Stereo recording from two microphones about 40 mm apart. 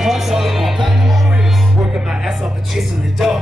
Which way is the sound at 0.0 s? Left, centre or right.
Centre.